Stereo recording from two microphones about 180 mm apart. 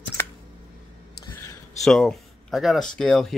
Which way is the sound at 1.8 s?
5° left (ahead or behind).